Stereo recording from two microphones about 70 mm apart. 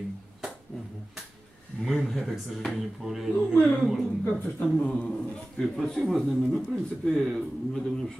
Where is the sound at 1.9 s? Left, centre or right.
Centre.